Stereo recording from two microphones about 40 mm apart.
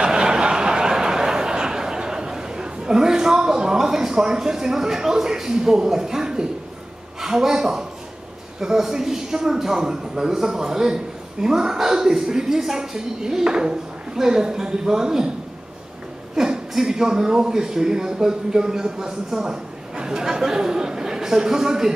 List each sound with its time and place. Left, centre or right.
0.0 s a sound: right
7.2 s a woman's voice: centre
16.3 s a woman's voice: centre